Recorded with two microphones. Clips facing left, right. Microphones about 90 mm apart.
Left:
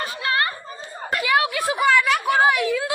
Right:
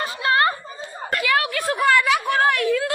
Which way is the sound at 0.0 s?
30° right (ahead or behind).